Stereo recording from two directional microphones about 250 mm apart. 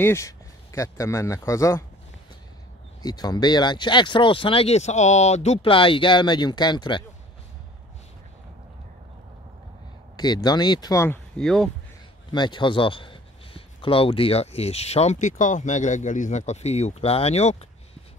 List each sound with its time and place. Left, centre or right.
0.0 s speech: centre
3.0 s a man's voice: centre
10.1 s speech: centre
12.3 s a man's voice: centre